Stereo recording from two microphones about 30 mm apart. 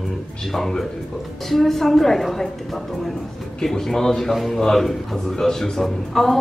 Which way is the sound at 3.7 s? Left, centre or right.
Centre.